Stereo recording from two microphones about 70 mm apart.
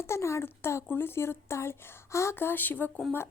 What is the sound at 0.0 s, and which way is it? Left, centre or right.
Speech, left.